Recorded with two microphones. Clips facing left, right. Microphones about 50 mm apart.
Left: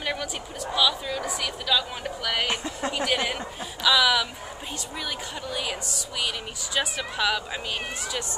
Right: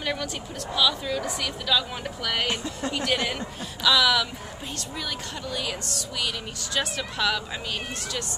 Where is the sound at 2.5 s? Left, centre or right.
Left.